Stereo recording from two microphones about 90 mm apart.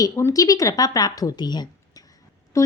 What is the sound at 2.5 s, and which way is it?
Speech, 35° left (ahead or behind).